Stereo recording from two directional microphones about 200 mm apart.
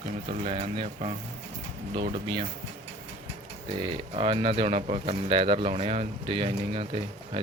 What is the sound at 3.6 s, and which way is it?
Speech, 25° right (ahead or behind).